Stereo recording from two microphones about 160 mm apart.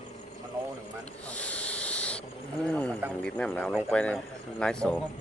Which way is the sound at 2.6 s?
5° left (ahead or behind).